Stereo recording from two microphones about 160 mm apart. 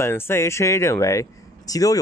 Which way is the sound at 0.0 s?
15° left (ahead or behind).